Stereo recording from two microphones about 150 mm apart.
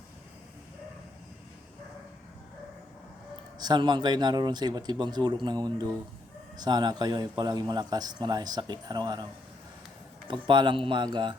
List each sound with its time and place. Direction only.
3.6 s a man's voice: 30° right (ahead or behind)
10.2 s speech: 35° right (ahead or behind)